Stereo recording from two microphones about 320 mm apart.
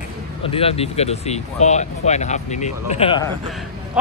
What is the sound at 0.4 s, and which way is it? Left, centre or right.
Speech, centre.